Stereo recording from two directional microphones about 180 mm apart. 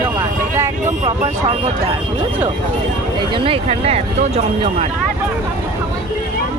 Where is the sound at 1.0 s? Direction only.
35° right (ahead or behind).